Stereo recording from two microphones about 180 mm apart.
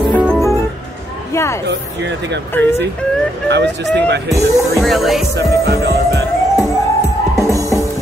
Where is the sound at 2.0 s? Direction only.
75° right (ahead or behind).